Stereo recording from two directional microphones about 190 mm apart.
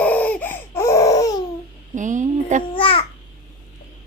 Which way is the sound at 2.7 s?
30° left (ahead or behind).